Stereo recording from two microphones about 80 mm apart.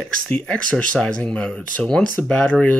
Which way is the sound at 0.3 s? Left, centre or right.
Centre.